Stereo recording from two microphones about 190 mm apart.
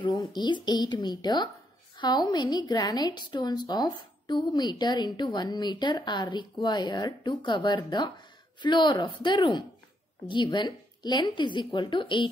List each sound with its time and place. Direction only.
0.0 s a woman's voice: 20° left (ahead or behind)